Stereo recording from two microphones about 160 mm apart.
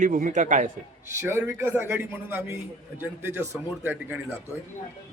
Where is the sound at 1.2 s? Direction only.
15° right (ahead or behind).